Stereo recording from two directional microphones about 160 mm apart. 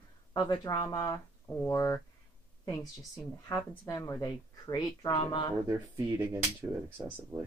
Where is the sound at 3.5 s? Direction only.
20° left (ahead or behind).